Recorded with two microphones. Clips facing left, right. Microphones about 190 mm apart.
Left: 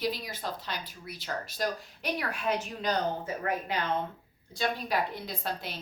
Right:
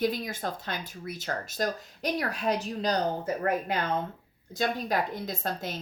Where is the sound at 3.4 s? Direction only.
45° right (ahead or behind).